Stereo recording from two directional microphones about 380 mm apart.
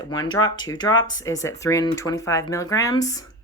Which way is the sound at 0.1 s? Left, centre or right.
Centre.